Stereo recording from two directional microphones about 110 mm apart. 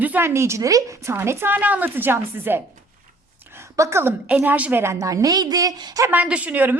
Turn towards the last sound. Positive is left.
turn(degrees=-15)  # may be behind; listen again after turning